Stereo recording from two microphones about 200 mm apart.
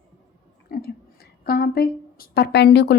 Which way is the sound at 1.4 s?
50° left (ahead or behind).